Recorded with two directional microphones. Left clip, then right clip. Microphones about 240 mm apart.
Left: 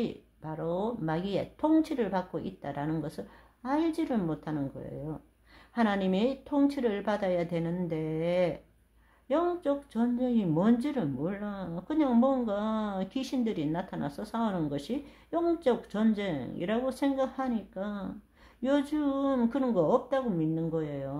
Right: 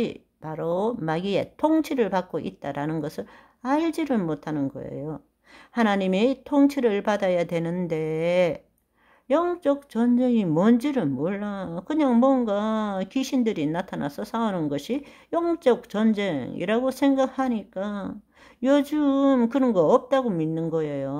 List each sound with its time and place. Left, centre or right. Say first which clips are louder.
0.0 s speech: right 6 dB; right